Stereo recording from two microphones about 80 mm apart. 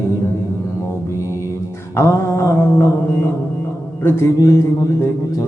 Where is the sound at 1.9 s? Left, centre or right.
Left.